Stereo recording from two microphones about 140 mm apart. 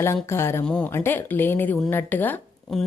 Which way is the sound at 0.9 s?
15° left (ahead or behind).